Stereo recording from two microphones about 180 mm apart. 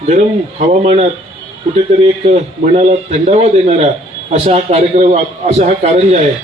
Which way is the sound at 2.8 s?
35° right (ahead or behind).